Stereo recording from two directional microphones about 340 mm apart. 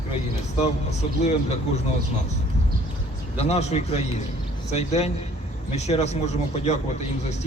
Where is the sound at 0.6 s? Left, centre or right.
Centre.